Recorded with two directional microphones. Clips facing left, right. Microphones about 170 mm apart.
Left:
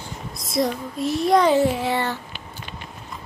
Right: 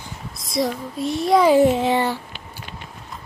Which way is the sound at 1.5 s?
20° right (ahead or behind).